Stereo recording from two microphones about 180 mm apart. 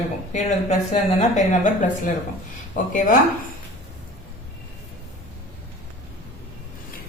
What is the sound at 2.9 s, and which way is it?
Speech, 45° left (ahead or behind).